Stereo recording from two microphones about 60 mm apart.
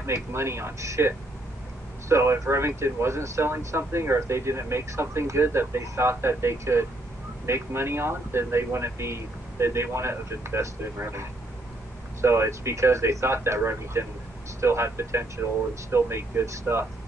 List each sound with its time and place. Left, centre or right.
0.0 s speech: right
2.0 s speech: right